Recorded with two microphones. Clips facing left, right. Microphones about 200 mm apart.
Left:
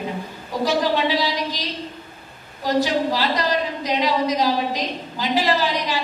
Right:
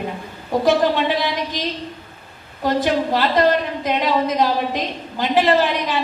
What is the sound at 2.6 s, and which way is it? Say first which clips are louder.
A woman's voice: right 1 dB; 55° right (ahead or behind).